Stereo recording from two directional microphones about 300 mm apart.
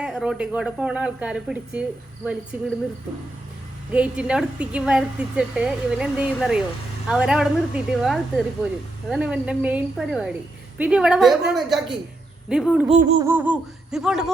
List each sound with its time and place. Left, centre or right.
0.0 s a woman's voice: centre
3.9 s a woman's voice: centre
12.9 s a sound: right
13.2 s a woman's voice: centre